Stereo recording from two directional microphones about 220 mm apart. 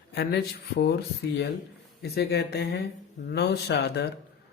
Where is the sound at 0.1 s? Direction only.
45° left (ahead or behind).